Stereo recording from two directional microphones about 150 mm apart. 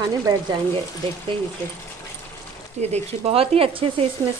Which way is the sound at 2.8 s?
40° right (ahead or behind).